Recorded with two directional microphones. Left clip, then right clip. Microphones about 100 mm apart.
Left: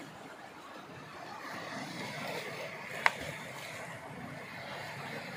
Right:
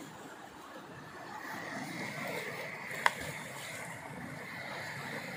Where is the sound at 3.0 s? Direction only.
75° right (ahead or behind).